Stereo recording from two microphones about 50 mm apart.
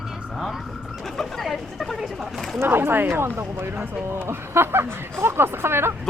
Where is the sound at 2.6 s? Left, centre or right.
Right.